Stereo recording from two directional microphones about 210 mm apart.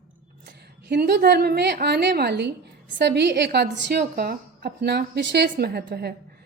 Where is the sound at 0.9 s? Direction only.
50° right (ahead or behind).